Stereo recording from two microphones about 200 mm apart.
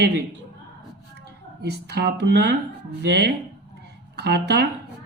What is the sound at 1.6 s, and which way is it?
Speech, 55° right (ahead or behind).